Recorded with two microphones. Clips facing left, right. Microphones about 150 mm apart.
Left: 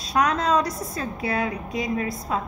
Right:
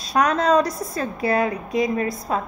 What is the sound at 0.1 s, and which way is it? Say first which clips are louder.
A woman's voice: right 3 dB; 40° right (ahead or behind).